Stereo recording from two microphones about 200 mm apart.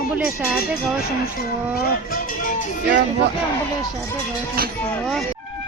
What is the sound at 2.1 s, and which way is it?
Music, 45° left (ahead or behind).